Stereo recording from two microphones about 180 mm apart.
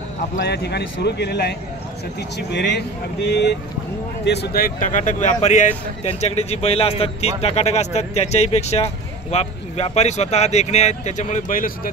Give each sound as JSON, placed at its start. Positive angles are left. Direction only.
{"t": 0.4, "sound": "speech", "side_deg": 65}